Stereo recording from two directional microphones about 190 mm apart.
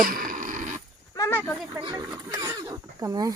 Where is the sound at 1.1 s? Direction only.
15° left (ahead or behind).